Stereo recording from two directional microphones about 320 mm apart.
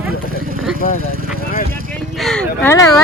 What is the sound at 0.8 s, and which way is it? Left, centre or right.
Speech, left.